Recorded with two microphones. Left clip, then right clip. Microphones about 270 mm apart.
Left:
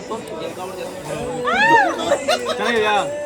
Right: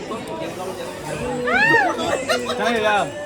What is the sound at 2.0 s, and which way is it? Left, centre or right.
Speech, left.